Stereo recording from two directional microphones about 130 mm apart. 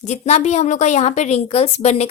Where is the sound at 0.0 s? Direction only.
60° left (ahead or behind).